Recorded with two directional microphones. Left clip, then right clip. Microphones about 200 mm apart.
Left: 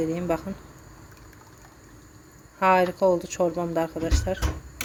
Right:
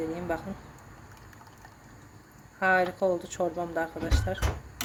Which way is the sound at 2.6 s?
25° left (ahead or behind).